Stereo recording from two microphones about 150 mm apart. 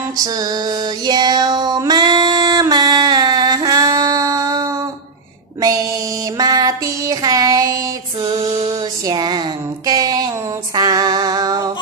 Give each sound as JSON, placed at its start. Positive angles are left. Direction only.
{"t": 0.2, "sound": "female singing", "side_deg": -25}
{"t": 5.6, "sound": "music", "side_deg": -25}
{"t": 6.3, "sound": "child singing", "side_deg": -25}
{"t": 8.6, "sound": "a sound", "side_deg": -25}